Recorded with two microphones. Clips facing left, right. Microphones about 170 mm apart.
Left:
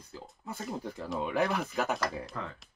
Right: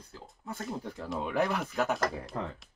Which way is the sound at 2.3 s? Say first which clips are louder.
Right 3 dB; 30° right (ahead or behind).